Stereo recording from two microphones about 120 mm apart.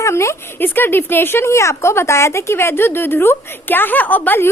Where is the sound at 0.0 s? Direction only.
25° left (ahead or behind).